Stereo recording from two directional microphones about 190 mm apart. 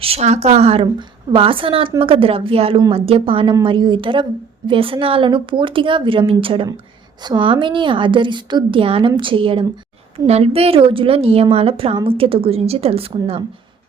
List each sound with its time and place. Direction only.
0.0 s a woman's voice: 35° right (ahead or behind)